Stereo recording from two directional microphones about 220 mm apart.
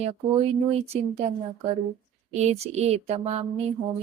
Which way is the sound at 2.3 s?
30° right (ahead or behind).